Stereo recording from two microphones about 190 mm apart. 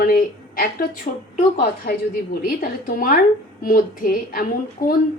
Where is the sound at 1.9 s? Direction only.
55° left (ahead or behind).